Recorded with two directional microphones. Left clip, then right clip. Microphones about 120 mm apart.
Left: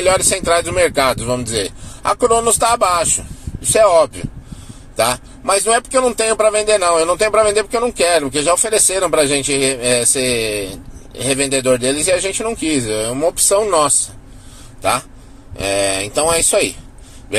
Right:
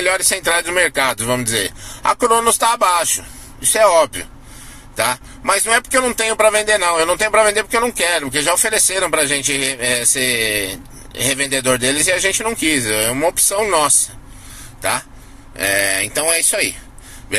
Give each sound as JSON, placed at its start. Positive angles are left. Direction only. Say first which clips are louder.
{"t": 0.0, "sound": "speech", "louder": "left 2 dB", "side_deg": 0}
{"t": 4.9, "sound": "a sound", "louder": "left 2 dB", "side_deg": 5}
{"t": 5.7, "sound": "speech", "louder": "left 2 dB", "side_deg": 10}
{"t": 15.5, "sound": "speech", "louder": "even", "side_deg": 20}